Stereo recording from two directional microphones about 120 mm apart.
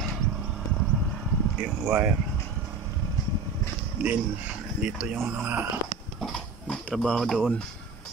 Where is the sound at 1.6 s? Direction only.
10° right (ahead or behind).